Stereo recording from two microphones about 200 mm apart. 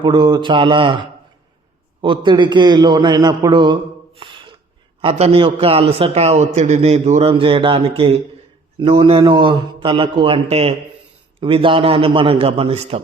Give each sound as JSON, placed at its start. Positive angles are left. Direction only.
{"t": 0.0, "sound": "a man's voice", "side_deg": -25}
{"t": 4.2, "sound": "a sound", "side_deg": -25}
{"t": 4.9, "sound": "a man's voice", "side_deg": -30}